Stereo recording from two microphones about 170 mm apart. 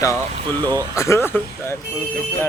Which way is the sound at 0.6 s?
25° right (ahead or behind).